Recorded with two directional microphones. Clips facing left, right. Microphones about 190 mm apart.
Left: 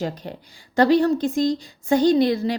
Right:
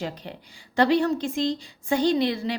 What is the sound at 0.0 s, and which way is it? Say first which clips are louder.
A woman's voice: left 5 dB; 40° left (ahead or behind).